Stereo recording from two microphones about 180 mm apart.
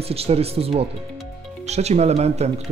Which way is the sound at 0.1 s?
35° right (ahead or behind).